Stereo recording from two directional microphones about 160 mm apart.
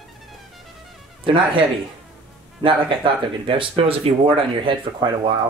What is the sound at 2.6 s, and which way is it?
Speech, 30° right (ahead or behind).